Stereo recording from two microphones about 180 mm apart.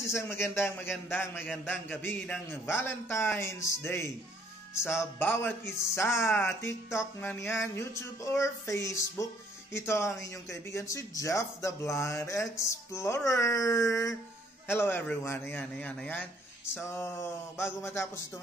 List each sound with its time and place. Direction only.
0.0 s a man's voice: 15° left (ahead or behind)
1.5 s a man's voice: centre (ahead or behind)
1.9 s speech: 10° left (ahead or behind)